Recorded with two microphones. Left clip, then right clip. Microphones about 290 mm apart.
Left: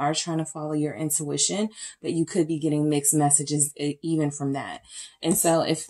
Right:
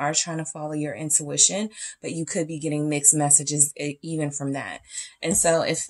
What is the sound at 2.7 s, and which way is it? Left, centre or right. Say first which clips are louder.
Speech: even; right.